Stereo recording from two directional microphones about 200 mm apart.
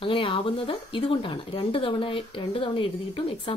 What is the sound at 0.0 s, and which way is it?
Speech, 25° left (ahead or behind).